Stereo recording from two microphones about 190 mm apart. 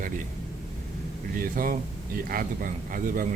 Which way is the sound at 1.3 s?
45° right (ahead or behind).